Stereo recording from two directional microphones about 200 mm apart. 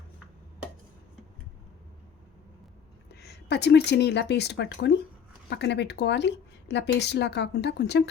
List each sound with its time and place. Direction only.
3.2 s speech: 55° left (ahead or behind)